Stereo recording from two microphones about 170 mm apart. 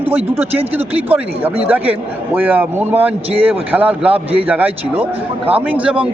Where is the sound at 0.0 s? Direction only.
35° right (ahead or behind).